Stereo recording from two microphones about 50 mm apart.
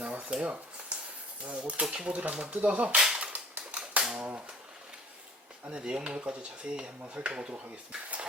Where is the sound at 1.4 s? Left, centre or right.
Right.